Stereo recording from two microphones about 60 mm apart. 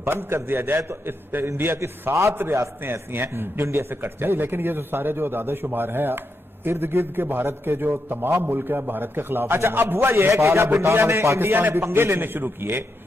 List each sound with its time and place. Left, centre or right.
0.0 s a man's voice: right
1.8 s a man's voice: right
2.3 s a man's voice: right